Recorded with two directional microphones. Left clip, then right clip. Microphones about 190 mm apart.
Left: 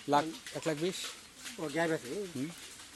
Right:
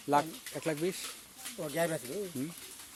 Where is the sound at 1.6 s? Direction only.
60° right (ahead or behind).